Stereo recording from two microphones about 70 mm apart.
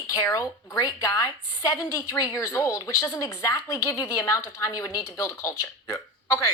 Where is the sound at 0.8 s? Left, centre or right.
Left.